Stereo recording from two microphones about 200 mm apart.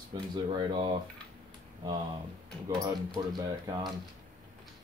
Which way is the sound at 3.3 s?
20° right (ahead or behind).